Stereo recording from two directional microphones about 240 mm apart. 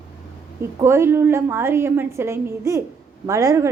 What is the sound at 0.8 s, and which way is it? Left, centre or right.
A woman's voice, centre.